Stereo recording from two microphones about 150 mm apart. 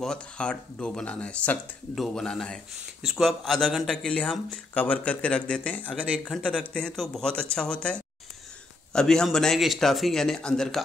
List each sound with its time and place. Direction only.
0.0 s speech: 5° left (ahead or behind)